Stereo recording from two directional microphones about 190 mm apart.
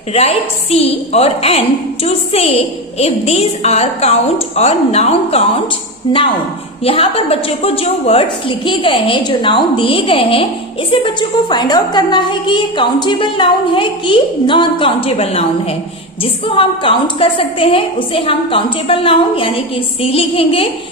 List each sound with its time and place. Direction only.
0.1 s a woman's voice: 35° left (ahead or behind)